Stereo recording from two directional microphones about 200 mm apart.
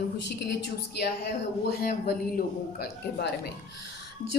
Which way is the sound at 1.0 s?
50° left (ahead or behind).